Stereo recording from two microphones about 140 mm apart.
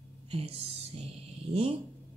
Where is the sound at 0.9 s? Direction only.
45° right (ahead or behind).